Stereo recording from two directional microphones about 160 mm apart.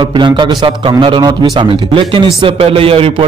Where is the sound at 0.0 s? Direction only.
30° right (ahead or behind).